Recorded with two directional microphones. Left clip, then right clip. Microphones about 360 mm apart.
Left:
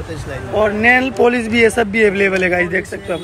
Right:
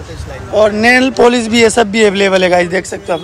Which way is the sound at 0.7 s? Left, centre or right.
Centre.